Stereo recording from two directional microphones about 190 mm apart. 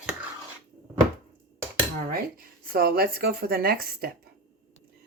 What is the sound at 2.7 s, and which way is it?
Speech, 50° right (ahead or behind).